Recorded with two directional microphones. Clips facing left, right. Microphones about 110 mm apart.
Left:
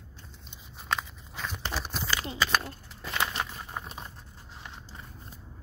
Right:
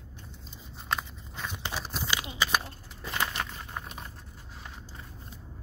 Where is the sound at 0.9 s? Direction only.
Centre (ahead or behind).